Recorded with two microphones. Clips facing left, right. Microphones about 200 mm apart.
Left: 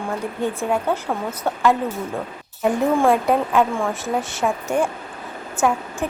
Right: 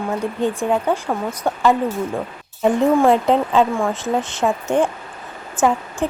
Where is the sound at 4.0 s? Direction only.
20° right (ahead or behind).